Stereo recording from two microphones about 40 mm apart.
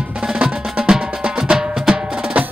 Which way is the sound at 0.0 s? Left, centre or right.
Centre.